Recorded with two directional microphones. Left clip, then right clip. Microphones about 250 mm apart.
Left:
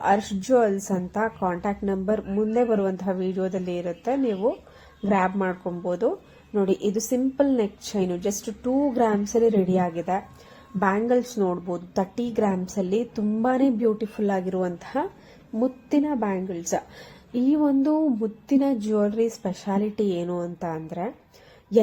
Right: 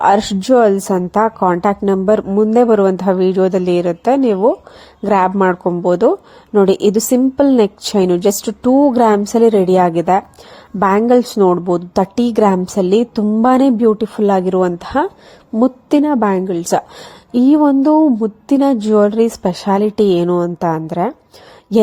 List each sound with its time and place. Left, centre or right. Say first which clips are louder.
0.0 s a woman's voice: right 11 dB; right